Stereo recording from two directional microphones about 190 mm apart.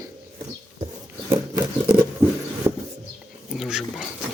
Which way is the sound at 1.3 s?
25° right (ahead or behind).